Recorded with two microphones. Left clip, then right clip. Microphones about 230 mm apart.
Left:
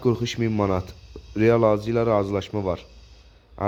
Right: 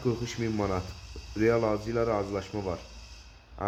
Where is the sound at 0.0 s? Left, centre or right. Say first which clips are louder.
Left 7 dB; left.